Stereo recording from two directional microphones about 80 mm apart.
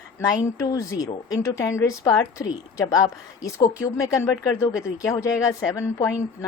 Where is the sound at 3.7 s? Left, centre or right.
Left.